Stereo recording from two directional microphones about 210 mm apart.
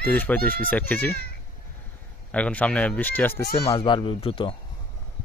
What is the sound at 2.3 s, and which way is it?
Speech, 5° left (ahead or behind).